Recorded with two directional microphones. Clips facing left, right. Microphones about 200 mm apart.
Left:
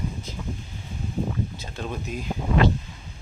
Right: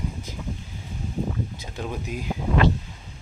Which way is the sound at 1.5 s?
15° right (ahead or behind).